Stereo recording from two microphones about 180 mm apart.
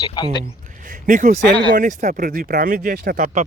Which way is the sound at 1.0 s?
45° right (ahead or behind).